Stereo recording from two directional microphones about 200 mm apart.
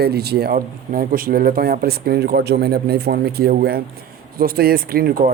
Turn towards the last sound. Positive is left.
turn(degrees=-50)  # may be behind; listen again after turning